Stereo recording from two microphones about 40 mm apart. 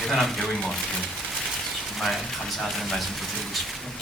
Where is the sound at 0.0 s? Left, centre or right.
Centre.